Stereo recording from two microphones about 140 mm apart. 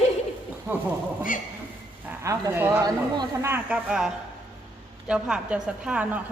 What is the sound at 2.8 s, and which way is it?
Speech, 30° right (ahead or behind).